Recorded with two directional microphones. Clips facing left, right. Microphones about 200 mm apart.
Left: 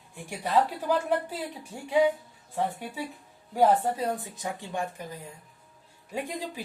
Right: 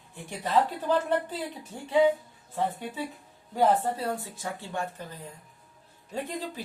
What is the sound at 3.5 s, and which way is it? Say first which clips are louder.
A man's voice: left 1 dB; 15° left (ahead or behind).